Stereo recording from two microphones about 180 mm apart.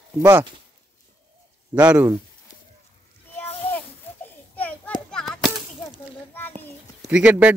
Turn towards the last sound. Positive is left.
turn(degrees=-10)  # may be behind; listen again after turning